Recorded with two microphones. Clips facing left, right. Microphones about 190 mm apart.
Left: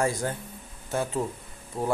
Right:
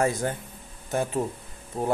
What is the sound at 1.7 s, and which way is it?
Speech, 35° right (ahead or behind).